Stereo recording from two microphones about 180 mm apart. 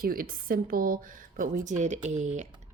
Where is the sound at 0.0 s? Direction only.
50° right (ahead or behind).